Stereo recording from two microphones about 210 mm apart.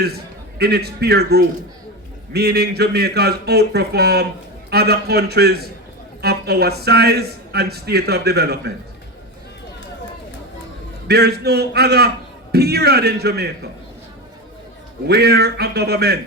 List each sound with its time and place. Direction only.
0.6 s a man's voice: 50° right (ahead or behind)
11.1 s a man's voice: 50° right (ahead or behind)
15.0 s a man's voice: 50° right (ahead or behind)